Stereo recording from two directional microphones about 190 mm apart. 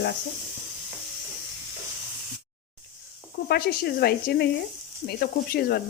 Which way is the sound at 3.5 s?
55° left (ahead or behind).